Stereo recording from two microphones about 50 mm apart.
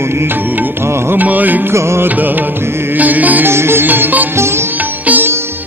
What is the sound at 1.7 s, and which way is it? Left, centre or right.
Music, right.